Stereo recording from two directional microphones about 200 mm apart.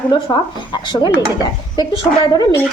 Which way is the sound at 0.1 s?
20° left (ahead or behind).